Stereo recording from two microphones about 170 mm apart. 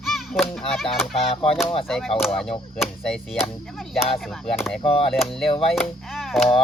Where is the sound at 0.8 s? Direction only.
Centre (ahead or behind).